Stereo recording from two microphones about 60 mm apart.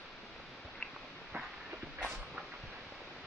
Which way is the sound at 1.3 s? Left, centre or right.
Right.